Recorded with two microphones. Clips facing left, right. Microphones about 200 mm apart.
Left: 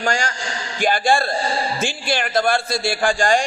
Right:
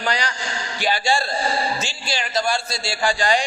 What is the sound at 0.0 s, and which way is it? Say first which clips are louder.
A man's voice: left 2 dB; 45° left (ahead or behind).